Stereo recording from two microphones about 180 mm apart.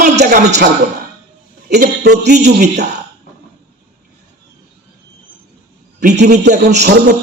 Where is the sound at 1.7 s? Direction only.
65° right (ahead or behind).